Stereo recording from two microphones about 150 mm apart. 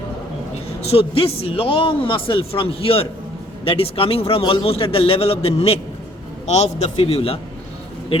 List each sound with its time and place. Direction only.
0.8 s a man's voice: 40° left (ahead or behind)